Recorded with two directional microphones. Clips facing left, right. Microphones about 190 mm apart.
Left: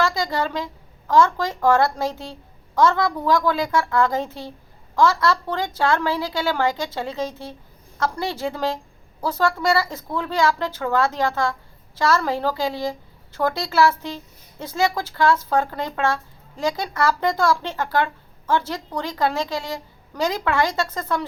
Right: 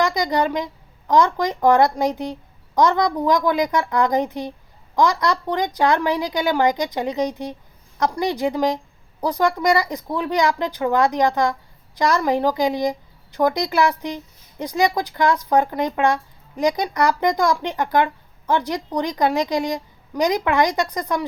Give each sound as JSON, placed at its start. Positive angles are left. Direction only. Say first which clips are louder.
{"t": 0.0, "sound": "speech", "louder": "right 3 dB", "side_deg": -15}